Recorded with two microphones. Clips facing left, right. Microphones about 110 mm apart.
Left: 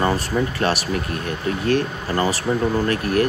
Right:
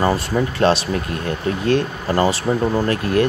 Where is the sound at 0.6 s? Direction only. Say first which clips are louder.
Right 4 dB; 25° right (ahead or behind).